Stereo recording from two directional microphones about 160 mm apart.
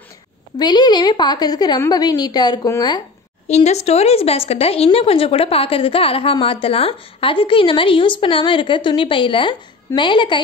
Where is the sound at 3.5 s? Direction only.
45° left (ahead or behind).